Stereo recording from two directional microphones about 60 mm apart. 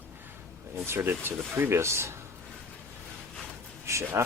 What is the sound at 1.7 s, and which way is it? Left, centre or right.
Speech, right.